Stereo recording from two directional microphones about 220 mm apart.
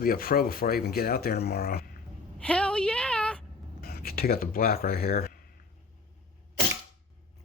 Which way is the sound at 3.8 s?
45° left (ahead or behind).